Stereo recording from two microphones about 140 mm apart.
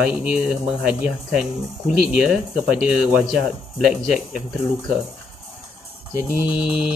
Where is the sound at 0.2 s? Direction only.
5° right (ahead or behind).